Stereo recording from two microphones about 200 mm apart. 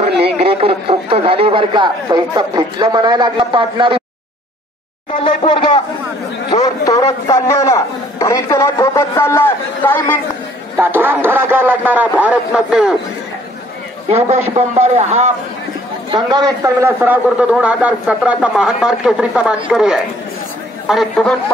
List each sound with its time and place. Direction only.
0.0 s speech: 30° right (ahead or behind)
5.2 s speech: 25° left (ahead or behind)
6.5 s a sound: 20° left (ahead or behind)
7.2 s a man's voice: 15° left (ahead or behind)
10.8 s a man's voice: 10° right (ahead or behind)
14.0 s a man's voice: 30° right (ahead or behind)
16.1 s a man's voice: 20° right (ahead or behind); by 21.4 s centre (ahead or behind)